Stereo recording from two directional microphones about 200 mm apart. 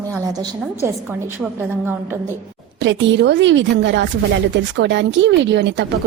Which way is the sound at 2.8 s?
65° right (ahead or behind).